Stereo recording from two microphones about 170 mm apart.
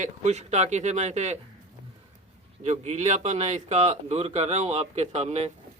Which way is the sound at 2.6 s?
40° right (ahead or behind).